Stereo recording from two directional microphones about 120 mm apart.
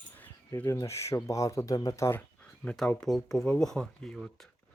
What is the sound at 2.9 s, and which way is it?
Speech, centre (ahead or behind).